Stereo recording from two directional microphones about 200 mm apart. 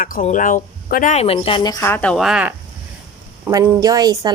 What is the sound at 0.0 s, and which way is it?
A woman's voice, 40° left (ahead or behind).